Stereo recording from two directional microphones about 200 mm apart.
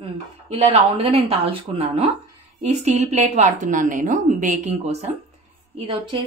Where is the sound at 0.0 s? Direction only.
30° right (ahead or behind).